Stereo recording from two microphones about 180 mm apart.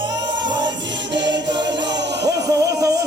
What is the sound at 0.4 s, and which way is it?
Music, 25° right (ahead or behind).